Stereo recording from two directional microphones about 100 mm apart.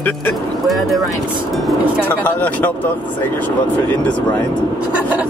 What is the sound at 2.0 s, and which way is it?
Speech, 15° left (ahead or behind).